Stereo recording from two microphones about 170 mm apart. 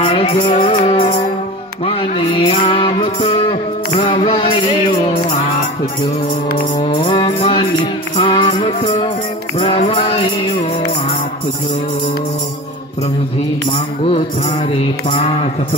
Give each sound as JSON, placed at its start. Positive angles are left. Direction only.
{"t": 0.0, "sound": "music", "side_deg": 40}
{"t": 6.8, "sound": "music", "side_deg": 35}
{"t": 14.7, "sound": "music", "side_deg": 35}